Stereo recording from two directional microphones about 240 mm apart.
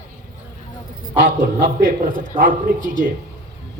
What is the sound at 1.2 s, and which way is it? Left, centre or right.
A man's voice, right.